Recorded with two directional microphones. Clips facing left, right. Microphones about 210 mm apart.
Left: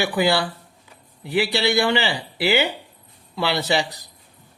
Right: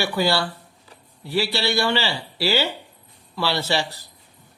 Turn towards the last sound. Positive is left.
turn(degrees=15)  # may be behind; listen again after turning